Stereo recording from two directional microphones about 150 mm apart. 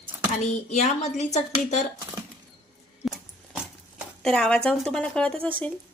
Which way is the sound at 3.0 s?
5° right (ahead or behind).